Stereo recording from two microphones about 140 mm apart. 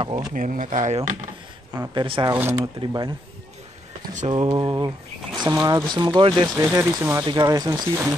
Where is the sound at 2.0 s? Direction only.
35° right (ahead or behind).